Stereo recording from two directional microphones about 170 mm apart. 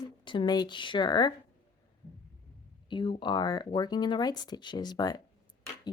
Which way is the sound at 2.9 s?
30° left (ahead or behind).